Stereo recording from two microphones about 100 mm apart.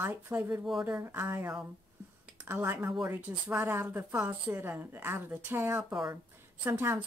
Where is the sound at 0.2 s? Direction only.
20° right (ahead or behind).